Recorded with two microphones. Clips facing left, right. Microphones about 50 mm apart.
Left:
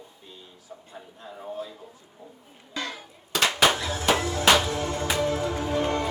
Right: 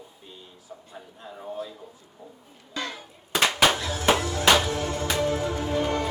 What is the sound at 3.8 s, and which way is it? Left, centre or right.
Music, left.